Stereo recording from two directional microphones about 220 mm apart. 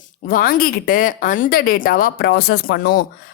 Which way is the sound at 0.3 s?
40° left (ahead or behind).